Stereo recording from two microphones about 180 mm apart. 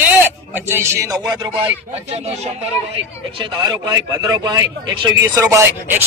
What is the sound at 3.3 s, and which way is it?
Speech, 20° right (ahead or behind).